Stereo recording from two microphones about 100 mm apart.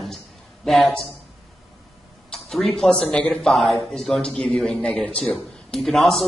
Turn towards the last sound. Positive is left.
turn(degrees=0)  # may be behind; listen again after turning